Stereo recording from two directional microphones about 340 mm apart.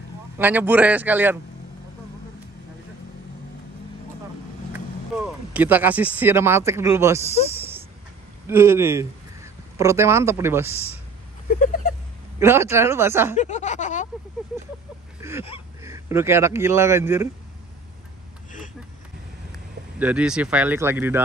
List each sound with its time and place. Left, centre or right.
0.4 s speech: centre
5.2 s speech: centre
8.5 s speech: centre
11.4 s speech: left
12.4 s speech: centre
13.4 s speech: left
15.2 s a sound: centre
15.8 s speech: centre
20.0 s speech: centre